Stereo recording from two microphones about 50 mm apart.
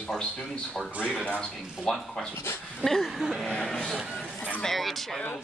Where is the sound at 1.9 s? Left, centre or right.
Centre.